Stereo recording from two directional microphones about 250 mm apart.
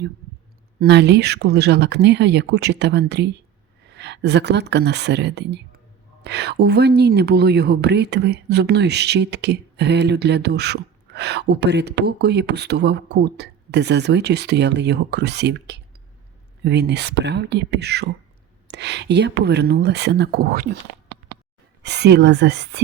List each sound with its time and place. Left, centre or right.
0.8 s a woman's voice: right
21.8 s speech: right